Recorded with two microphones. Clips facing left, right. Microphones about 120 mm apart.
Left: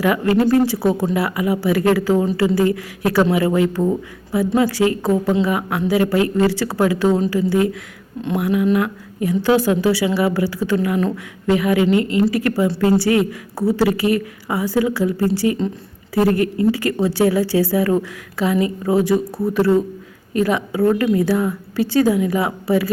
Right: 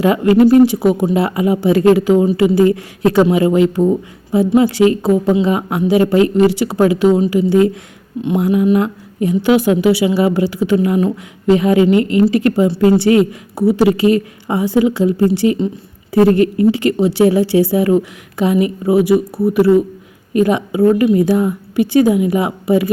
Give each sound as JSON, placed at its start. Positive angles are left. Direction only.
{"t": 0.0, "sound": "speech", "side_deg": -25}